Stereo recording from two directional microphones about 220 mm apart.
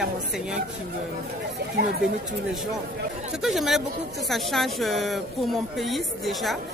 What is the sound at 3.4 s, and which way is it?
A woman's voice, centre (ahead or behind).